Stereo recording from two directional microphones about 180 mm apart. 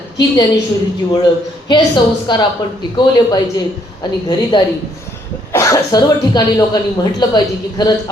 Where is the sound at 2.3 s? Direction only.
25° left (ahead or behind).